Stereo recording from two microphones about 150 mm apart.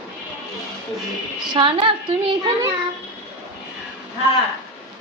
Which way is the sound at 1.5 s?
35° right (ahead or behind).